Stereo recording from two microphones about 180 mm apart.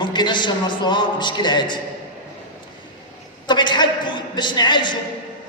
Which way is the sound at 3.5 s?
25° left (ahead or behind).